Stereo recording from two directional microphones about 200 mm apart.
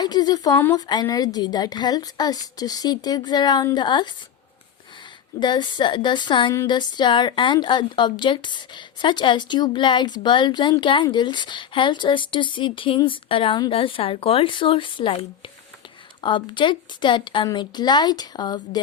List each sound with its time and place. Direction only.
0.0 s a woman's voice: 20° left (ahead or behind)
5.4 s a woman's voice: 20° left (ahead or behind)